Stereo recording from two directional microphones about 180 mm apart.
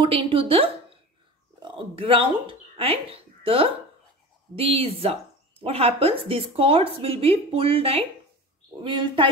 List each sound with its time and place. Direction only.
0.0 s speech: 30° right (ahead or behind)